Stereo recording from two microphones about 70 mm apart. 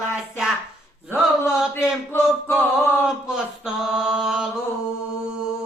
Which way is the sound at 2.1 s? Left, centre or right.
Left.